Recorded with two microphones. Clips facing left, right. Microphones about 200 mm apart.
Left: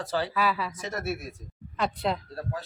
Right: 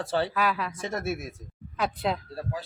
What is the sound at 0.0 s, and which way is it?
Speech, 30° right (ahead or behind).